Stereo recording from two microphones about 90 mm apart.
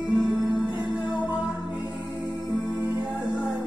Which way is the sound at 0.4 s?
15° right (ahead or behind).